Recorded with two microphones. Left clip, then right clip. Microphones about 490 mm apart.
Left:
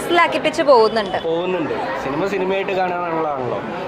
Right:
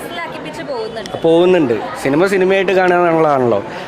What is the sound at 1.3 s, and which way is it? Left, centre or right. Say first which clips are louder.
A man's voice: right 9 dB; right.